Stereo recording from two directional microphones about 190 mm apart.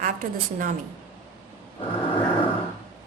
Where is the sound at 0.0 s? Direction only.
45° right (ahead or behind).